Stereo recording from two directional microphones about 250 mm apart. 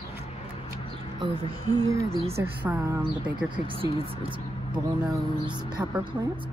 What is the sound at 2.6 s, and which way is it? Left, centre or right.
Speech, centre.